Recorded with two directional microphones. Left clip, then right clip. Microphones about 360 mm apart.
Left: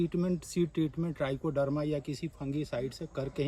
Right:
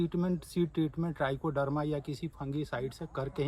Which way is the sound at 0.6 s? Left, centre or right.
Right.